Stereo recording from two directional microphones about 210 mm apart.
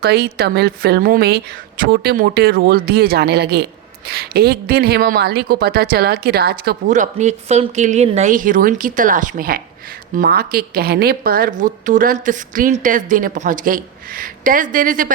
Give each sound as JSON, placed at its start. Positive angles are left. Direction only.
{"t": 0.0, "sound": "a woman's voice", "side_deg": -50}
{"t": 6.8, "sound": "a woman's voice", "side_deg": -35}